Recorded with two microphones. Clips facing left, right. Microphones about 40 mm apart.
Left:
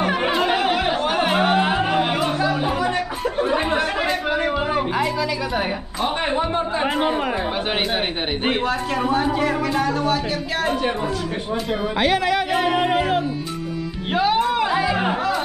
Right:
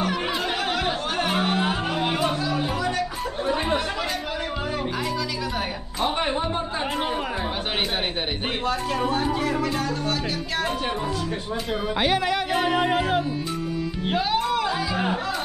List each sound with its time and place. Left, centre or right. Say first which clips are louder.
0.5 s music: left 5 dB; centre
4.7 s a sound: left 6 dB; left
7.0 s speech: left 5 dB; centre
8.6 s speech: left 3 dB; centre
14.1 s music: left 5 dB; centre